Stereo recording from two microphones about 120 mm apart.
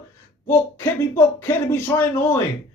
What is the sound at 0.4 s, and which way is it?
Speech, 20° left (ahead or behind).